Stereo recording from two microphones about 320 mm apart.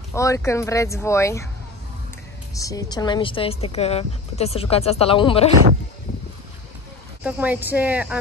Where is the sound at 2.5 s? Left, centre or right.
Centre.